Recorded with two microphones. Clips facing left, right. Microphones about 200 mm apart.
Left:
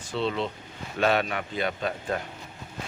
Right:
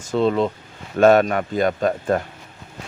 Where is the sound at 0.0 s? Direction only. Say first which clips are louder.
Right 9 dB; 45° right (ahead or behind).